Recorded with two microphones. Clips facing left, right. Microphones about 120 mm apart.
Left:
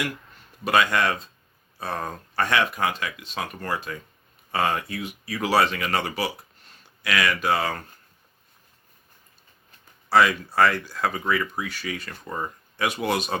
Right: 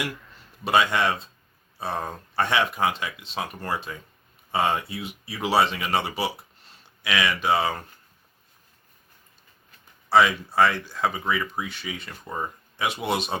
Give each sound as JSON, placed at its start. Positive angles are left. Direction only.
{"t": 0.6, "sound": "speech", "side_deg": -25}
{"t": 10.1, "sound": "speech", "side_deg": -15}
{"t": 11.1, "sound": "speech", "side_deg": -10}
{"t": 11.7, "sound": "speech", "side_deg": -25}